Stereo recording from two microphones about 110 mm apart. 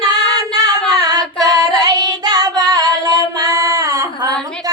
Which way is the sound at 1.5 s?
35° right (ahead or behind).